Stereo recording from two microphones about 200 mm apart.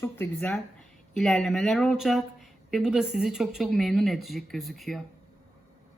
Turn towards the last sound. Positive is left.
turn(degrees=0)  # may be behind; listen again after turning